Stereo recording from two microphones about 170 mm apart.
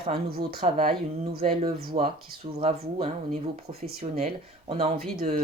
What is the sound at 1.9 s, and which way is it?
Speech, 45° right (ahead or behind).